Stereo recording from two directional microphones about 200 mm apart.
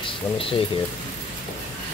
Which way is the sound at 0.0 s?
25° left (ahead or behind).